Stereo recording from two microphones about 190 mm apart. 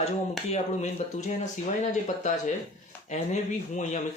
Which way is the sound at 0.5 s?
35° left (ahead or behind).